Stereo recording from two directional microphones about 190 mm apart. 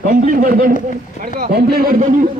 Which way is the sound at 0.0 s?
45° right (ahead or behind).